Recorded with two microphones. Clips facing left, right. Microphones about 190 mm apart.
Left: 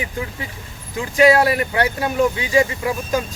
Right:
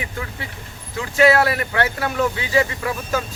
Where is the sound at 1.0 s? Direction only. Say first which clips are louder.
Left 2 dB; 15° left (ahead or behind).